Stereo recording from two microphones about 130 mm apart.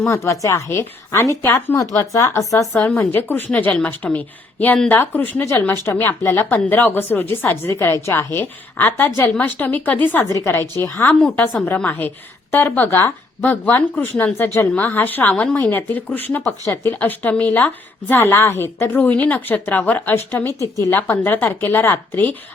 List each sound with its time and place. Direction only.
0.1 s a woman's voice: 20° left (ahead or behind)
11.1 s a woman's voice: 5° left (ahead or behind)